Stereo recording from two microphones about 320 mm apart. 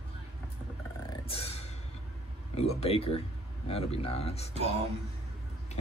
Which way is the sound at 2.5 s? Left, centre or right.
Centre.